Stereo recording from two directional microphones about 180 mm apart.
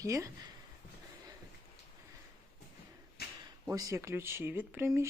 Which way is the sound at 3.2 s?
60° left (ahead or behind).